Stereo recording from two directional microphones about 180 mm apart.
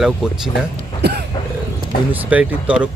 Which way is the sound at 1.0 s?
65° right (ahead or behind).